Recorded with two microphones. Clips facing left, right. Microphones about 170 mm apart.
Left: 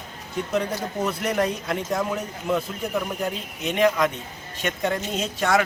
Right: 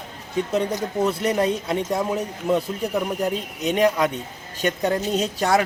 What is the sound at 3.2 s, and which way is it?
Speech, 35° right (ahead or behind).